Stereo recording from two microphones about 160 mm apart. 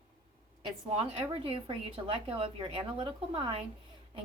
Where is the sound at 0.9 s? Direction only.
35° right (ahead or behind).